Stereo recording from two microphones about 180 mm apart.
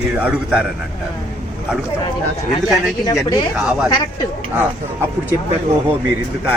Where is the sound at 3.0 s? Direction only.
20° left (ahead or behind).